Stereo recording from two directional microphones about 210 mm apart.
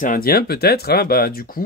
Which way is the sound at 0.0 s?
40° left (ahead or behind).